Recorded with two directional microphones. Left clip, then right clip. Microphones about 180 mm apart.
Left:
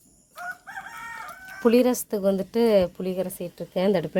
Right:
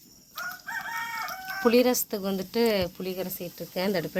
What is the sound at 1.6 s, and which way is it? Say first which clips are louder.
Speech: left 2 dB; 60° left (ahead or behind).